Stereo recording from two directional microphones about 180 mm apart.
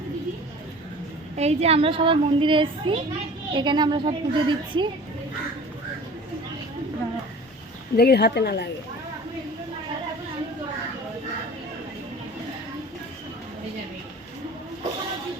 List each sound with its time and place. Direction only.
1.4 s a woman's voice: 35° right (ahead or behind)
7.9 s speech: 60° left (ahead or behind)